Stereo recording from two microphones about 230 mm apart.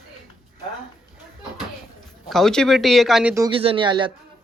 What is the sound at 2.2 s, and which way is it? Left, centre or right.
A man's voice, centre.